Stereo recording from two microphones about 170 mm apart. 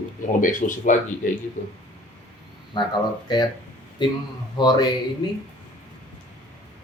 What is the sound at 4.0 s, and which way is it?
Speech, 25° left (ahead or behind).